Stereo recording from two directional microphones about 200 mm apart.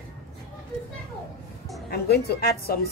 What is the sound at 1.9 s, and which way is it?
Speech, 55° left (ahead or behind).